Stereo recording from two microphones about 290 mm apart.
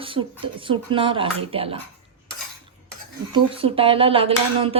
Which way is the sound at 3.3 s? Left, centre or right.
Centre.